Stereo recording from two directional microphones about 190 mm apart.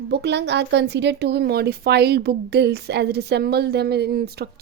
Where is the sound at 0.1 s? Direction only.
65° right (ahead or behind).